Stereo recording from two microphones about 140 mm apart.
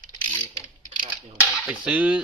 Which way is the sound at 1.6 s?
10° right (ahead or behind).